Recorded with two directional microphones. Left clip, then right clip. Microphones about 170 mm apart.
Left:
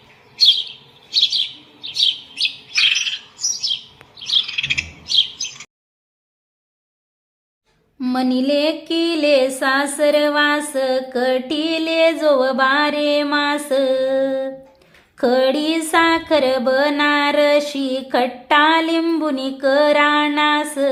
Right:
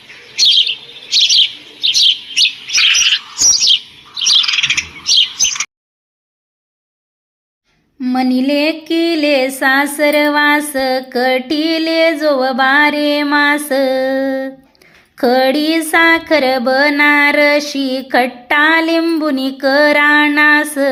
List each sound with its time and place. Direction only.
0.1 s chirp: 55° right (ahead or behind)
3.5 s bird: 60° right (ahead or behind)
8.0 s a sound: 10° right (ahead or behind)